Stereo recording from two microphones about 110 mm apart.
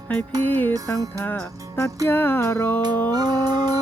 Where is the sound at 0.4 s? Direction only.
15° left (ahead or behind).